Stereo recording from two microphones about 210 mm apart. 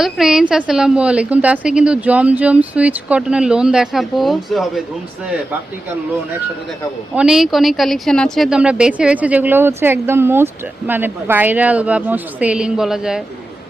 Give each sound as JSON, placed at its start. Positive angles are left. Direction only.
{"t": 0.0, "sound": "a woman's voice", "side_deg": 0}
{"t": 7.1, "sound": "speech", "side_deg": -5}